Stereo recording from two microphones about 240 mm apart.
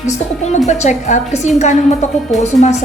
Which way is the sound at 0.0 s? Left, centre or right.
Left.